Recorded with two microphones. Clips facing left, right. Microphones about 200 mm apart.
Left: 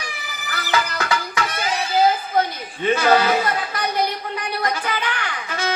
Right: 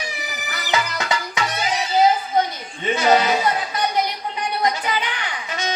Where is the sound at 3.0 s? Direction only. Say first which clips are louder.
Right 1 dB; 20° right (ahead or behind).